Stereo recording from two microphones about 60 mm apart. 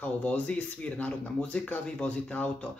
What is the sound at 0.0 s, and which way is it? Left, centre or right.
A man's voice, left.